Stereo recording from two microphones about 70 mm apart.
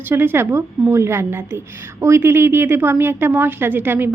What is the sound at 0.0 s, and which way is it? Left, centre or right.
A woman's voice, right.